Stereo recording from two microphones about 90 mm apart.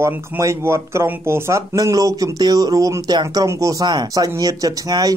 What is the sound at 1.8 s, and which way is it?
Speech, 40° right (ahead or behind).